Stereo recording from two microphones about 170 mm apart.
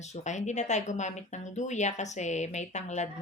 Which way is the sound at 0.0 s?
40° left (ahead or behind).